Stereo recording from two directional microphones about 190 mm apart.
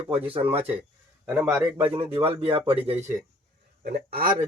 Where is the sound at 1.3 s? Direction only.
5° right (ahead or behind).